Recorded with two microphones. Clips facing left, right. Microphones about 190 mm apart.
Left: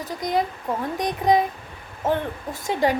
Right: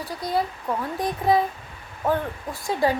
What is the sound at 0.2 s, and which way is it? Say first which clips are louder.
A woman's voice: left 2 dB; 15° left (ahead or behind).